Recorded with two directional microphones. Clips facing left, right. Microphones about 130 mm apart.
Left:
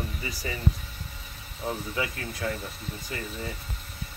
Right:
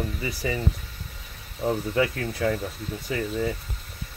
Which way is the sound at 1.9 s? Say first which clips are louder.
Right 7 dB; 85° right.